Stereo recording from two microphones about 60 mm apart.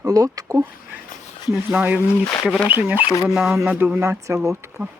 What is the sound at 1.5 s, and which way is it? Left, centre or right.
Speech, right.